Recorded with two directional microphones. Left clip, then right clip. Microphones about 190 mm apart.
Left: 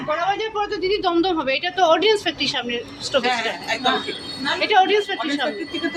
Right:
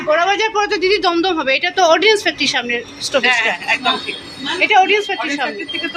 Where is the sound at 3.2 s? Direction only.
45° left (ahead or behind).